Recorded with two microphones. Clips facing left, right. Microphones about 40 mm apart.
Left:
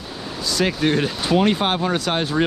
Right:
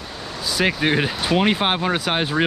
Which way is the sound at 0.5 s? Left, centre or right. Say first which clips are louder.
Even; centre.